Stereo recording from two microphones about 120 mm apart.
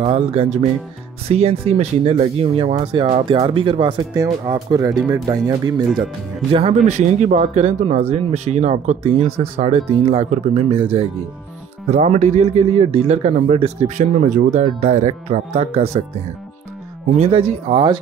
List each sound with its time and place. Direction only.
0.0 s speech: 55° right (ahead or behind)
4.1 s speech: 25° right (ahead or behind)
6.5 s speech: 60° right (ahead or behind)
11.8 s speech: 65° right (ahead or behind)
17.1 s speech: 60° right (ahead or behind)